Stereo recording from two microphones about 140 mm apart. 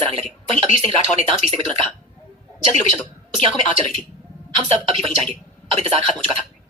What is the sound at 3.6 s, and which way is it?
A woman's voice, 45° right (ahead or behind).